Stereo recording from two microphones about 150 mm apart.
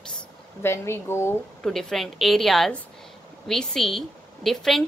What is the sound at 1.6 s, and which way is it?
A woman's voice, 5° left (ahead or behind).